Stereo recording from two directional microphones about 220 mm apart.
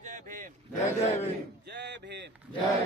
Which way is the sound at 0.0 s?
35° right (ahead or behind).